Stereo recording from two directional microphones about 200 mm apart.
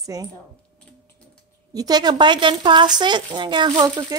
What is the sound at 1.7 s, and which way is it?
Speech, 20° right (ahead or behind).